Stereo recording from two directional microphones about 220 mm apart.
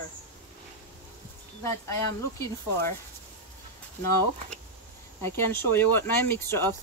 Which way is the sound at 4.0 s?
10° left (ahead or behind).